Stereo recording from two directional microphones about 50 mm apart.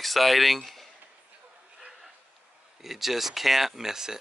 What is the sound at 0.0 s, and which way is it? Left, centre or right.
Speech, centre.